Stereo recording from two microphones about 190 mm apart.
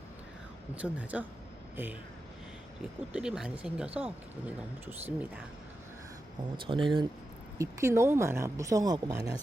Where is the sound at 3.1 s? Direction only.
5° right (ahead or behind).